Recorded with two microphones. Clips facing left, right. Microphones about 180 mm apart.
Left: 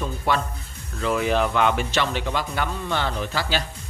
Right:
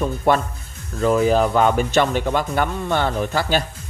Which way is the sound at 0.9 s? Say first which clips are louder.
Right 6 dB; 35° right (ahead or behind).